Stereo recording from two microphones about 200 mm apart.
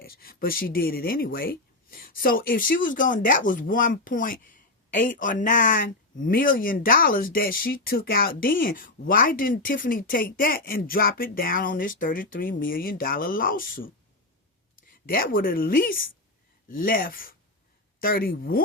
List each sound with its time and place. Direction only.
0.0 s speech: 50° left (ahead or behind)